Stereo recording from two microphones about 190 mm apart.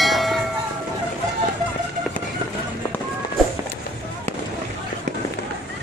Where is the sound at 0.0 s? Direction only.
Centre (ahead or behind).